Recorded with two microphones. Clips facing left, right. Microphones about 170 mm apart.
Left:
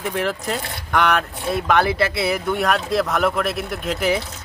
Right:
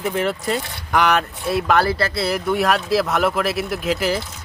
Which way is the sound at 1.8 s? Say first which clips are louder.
Left 1 dB; 20° left (ahead or behind).